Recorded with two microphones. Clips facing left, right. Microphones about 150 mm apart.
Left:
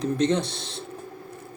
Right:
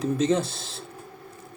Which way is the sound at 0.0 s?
5° right (ahead or behind).